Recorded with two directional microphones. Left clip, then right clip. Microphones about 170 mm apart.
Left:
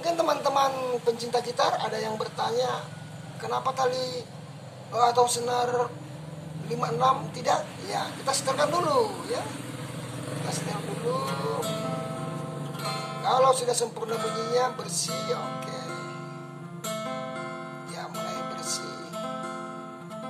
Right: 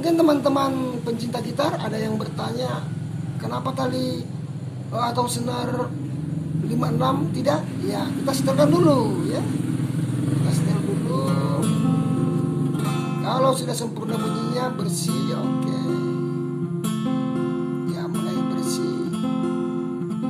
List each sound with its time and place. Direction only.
0.0 s a man's voice: 5° right (ahead or behind)
13.2 s a man's voice: 10° right (ahead or behind)
16.8 s music: 30° right (ahead or behind)
18.3 s music: 30° right (ahead or behind)